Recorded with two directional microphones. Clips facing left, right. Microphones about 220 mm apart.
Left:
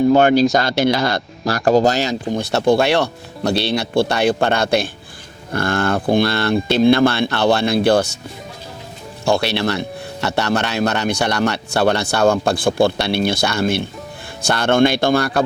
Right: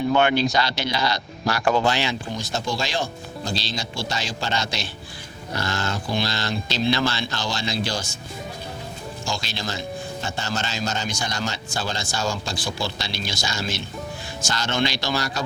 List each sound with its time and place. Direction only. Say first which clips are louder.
0.1 s speech: left 8 dB; 40° left (ahead or behind)
1.5 s speech: left 7 dB; 40° left (ahead or behind)
2.4 s speech: left 15 dB; 65° left (ahead or behind)
9.2 s speech: left 14 dB; 65° left (ahead or behind)